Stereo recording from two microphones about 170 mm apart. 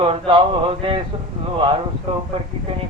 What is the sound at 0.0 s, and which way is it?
Speech, 30° right (ahead or behind).